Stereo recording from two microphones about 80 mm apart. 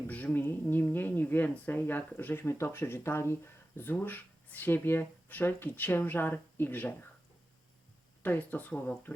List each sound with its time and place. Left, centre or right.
0.1 s speech: centre
8.2 s speech: left